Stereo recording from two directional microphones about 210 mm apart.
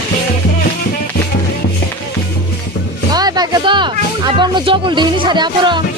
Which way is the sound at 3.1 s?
20° right (ahead or behind).